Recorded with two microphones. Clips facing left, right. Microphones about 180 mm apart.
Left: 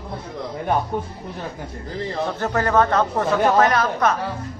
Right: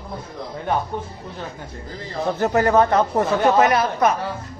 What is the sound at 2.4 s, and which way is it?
Speech, 15° right (ahead or behind).